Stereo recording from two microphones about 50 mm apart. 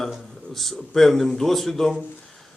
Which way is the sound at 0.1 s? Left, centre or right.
Centre.